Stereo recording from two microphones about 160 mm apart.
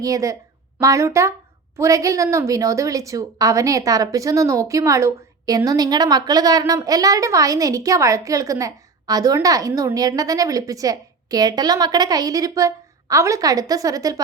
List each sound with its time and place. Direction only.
0.0 s a woman's voice: 20° right (ahead or behind)